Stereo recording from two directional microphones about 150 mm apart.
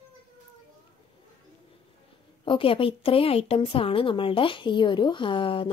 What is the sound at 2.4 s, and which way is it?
A woman's voice, 35° left (ahead or behind).